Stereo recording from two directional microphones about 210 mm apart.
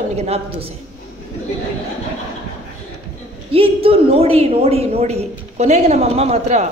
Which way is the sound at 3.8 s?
25° right (ahead or behind).